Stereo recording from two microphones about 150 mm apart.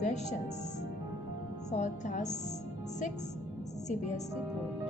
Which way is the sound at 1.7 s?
50° left (ahead or behind).